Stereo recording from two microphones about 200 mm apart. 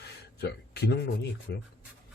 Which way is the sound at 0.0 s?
55° left (ahead or behind).